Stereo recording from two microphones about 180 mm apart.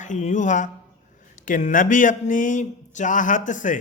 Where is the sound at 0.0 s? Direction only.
40° left (ahead or behind).